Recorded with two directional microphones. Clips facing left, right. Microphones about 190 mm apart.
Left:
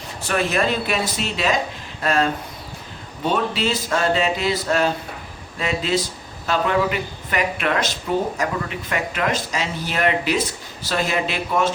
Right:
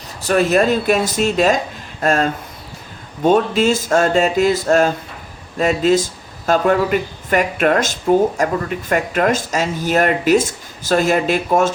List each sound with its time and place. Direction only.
0.2 s speech: 40° right (ahead or behind)
3.2 s speech: 45° right (ahead or behind)